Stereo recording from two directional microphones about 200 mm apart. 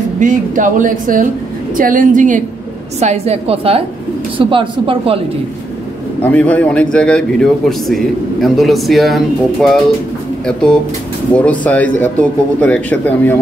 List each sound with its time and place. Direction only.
0.2 s speech: 40° right (ahead or behind)
6.2 s a man's voice: 5° left (ahead or behind)